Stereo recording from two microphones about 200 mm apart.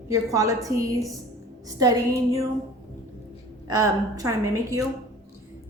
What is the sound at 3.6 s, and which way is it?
A woman's voice, 15° right (ahead or behind).